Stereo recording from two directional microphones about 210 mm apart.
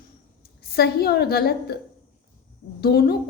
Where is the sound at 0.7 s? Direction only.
50° left (ahead or behind).